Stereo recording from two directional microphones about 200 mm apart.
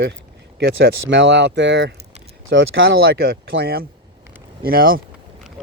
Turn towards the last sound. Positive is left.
turn(degrees=-45)  # may be behind; listen again after turning